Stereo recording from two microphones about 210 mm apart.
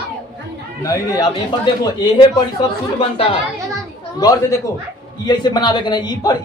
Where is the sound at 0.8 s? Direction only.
15° left (ahead or behind).